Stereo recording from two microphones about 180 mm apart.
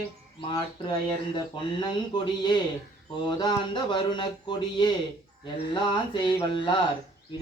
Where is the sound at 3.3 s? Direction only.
25° left (ahead or behind).